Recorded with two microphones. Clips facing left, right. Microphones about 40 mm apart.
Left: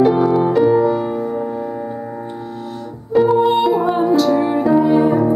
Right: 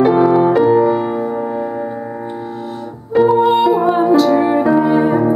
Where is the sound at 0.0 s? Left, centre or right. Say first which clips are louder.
Right 3 dB; centre.